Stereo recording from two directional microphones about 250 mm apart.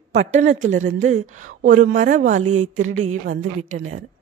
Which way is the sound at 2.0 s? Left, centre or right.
Right.